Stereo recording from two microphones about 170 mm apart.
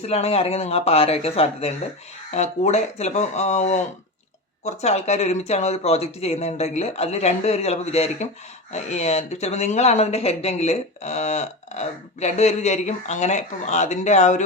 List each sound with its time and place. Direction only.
0.0 s speech: 40° left (ahead or behind)